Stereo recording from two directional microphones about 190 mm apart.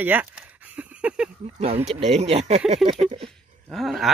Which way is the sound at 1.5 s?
35° right (ahead or behind).